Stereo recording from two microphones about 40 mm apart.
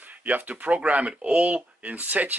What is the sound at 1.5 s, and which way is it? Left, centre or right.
Speech, right.